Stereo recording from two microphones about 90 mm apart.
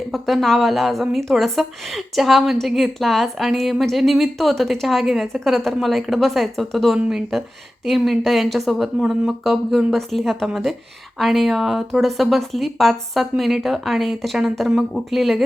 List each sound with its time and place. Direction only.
0.1 s a woman's voice: centre (ahead or behind)